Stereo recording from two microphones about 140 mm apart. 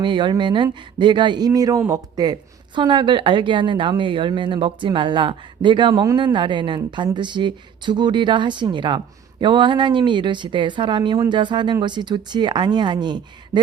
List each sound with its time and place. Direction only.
0.0 s speech: 35° right (ahead or behind)